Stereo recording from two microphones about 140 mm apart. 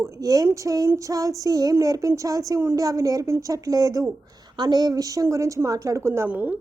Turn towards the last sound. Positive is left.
turn(degrees=-10)  # may be behind; listen again after turning